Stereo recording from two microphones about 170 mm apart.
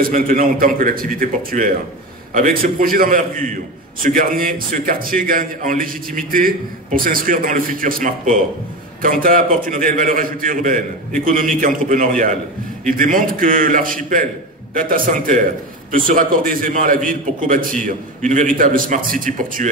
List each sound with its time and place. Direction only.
0.0 s a man's voice: 55° right (ahead or behind)